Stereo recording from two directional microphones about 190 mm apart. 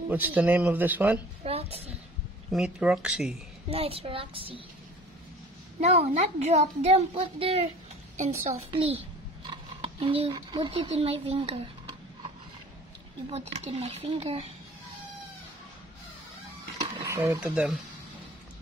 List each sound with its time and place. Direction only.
0.1 s speech: 10° right (ahead or behind)
1.4 s a woman's voice: 30° right (ahead or behind)
2.5 s speech: 5° right (ahead or behind)
3.7 s a woman's voice: 30° right (ahead or behind)
5.8 s a child's voice: 35° right (ahead or behind)
13.3 s a child's voice: 35° right (ahead or behind)
17.0 s speech: 15° right (ahead or behind)